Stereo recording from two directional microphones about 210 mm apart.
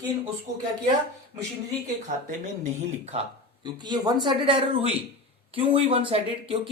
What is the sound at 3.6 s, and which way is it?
Speech, 20° right (ahead or behind).